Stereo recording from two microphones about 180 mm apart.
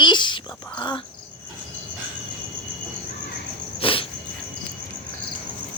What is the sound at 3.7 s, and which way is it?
Cricket, 30° left (ahead or behind).